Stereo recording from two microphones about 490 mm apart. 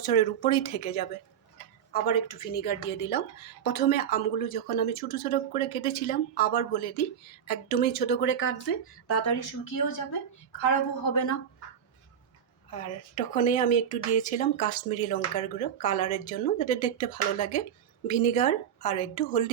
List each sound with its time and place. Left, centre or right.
0.0 s speech: centre; by 11.3 s left
12.7 s speech: centre